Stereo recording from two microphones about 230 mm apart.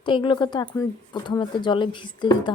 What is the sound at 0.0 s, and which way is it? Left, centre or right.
Speech, left.